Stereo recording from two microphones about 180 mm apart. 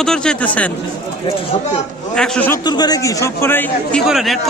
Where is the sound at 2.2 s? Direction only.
10° left (ahead or behind).